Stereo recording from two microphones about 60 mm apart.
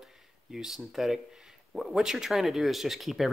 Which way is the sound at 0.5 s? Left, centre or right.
Centre.